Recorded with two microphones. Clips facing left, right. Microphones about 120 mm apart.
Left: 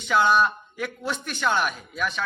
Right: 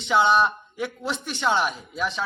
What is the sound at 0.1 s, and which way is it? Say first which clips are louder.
A man's voice: right 1 dB; 20° right (ahead or behind).